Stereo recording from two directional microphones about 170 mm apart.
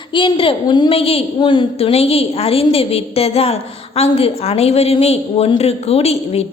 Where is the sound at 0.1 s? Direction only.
30° left (ahead or behind).